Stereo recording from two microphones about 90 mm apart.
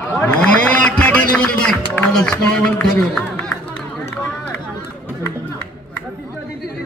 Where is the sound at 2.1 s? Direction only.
5° left (ahead or behind).